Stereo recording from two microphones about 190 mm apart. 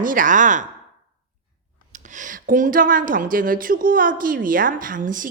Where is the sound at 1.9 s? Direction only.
40° right (ahead or behind).